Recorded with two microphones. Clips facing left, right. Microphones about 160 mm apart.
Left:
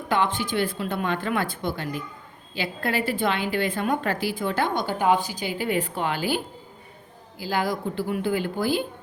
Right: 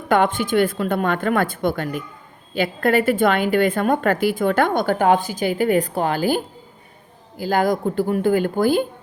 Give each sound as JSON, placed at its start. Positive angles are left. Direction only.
{"t": 0.1, "sound": "a woman's voice", "side_deg": -50}